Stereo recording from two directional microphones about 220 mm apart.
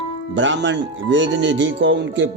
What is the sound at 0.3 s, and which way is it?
Speech, 60° right (ahead or behind).